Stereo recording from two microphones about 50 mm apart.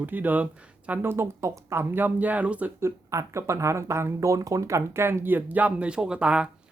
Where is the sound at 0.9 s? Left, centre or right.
Right.